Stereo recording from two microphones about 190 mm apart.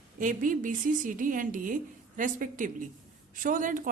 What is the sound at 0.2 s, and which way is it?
A woman's voice, 45° right (ahead or behind).